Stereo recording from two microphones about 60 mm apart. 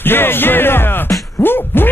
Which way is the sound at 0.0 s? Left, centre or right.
Left.